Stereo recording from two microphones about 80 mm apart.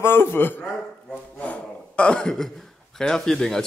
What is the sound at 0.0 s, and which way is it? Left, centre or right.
Speech, left.